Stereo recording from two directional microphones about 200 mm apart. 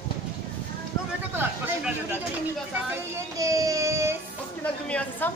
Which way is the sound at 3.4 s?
15° right (ahead or behind).